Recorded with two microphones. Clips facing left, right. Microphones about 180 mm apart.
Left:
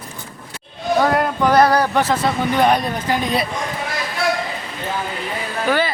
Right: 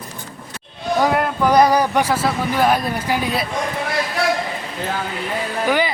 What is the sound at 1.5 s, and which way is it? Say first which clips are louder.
Speech: even; 10° right (ahead or behind).